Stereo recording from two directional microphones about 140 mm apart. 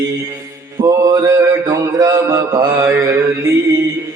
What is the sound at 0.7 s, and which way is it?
Mantra, 25° right (ahead or behind).